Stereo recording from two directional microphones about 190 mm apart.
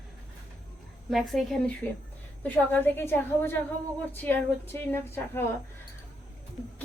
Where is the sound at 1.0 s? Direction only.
Centre (ahead or behind).